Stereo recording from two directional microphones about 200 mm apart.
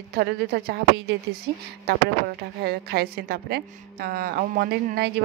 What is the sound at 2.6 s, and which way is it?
A woman's voice, 50° right (ahead or behind).